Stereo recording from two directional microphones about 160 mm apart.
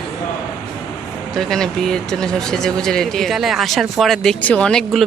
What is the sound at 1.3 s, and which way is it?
Speech, centre (ahead or behind).